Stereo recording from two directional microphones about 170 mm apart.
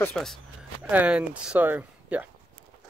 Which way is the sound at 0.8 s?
10° right (ahead or behind).